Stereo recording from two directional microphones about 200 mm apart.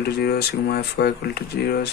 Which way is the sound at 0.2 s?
50° left (ahead or behind).